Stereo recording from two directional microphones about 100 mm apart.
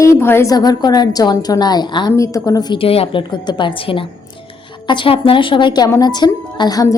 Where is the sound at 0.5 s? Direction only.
40° left (ahead or behind).